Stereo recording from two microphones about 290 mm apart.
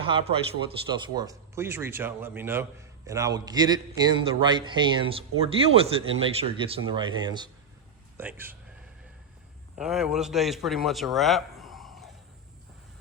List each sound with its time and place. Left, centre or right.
0.0 s speech: centre
9.7 s a man's voice: centre